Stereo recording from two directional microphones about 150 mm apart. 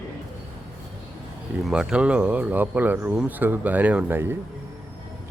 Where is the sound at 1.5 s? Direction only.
5° right (ahead or behind).